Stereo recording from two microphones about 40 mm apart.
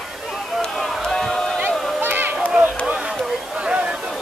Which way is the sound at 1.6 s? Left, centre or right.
Right.